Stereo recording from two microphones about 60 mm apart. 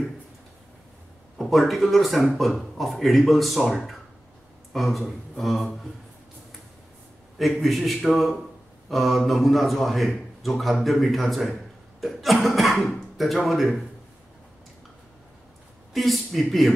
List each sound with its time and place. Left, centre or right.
1.4 s a man's voice: centre
7.3 s a man's voice: centre
15.9 s a man's voice: centre